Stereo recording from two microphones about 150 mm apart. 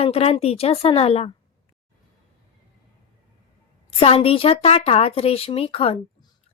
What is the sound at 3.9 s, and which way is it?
A woman's voice, 40° left (ahead or behind).